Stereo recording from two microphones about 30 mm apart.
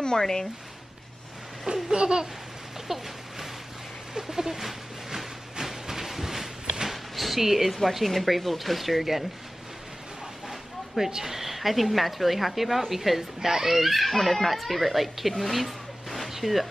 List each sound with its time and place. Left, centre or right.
0.0 s speech: left
1.7 s babbling: right
2.9 s speech: centre
4.1 s speech: centre
4.6 s train: centre
6.9 s a sound: centre
8.0 s speech: centre
11.2 s speech: centre
13.7 s speech: centre
15.5 s a sound: centre